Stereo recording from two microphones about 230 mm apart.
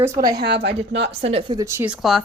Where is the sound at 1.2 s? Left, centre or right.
Right; by 2.2 s centre.